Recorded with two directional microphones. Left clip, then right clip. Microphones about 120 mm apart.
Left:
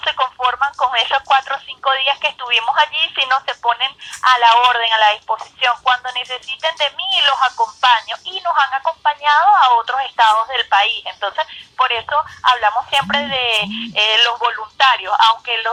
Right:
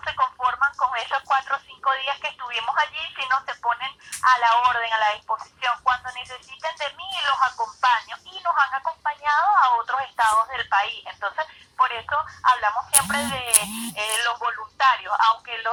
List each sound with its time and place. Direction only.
0.0 s speech: 15° left (ahead or behind)